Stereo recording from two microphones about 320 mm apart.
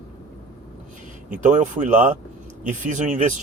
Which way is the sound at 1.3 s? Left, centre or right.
Right.